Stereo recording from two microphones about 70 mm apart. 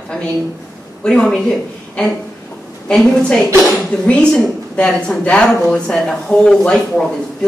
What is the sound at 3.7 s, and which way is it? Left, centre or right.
Speech, centre.